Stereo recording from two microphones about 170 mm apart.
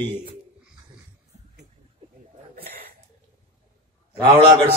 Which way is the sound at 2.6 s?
60° right (ahead or behind).